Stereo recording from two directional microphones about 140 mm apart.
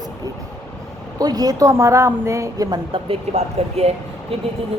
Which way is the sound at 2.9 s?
45° right (ahead or behind).